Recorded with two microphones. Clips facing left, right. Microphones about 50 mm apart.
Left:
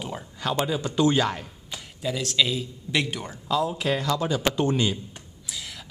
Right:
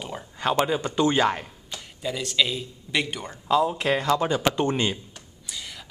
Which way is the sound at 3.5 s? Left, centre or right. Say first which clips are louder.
Right 3 dB; centre.